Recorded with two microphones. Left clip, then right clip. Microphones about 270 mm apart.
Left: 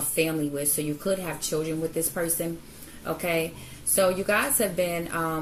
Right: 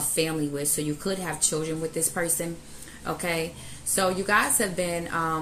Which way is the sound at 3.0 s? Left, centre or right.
Right.